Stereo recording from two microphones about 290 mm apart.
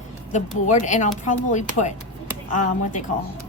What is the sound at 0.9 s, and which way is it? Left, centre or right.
A woman's voice, left.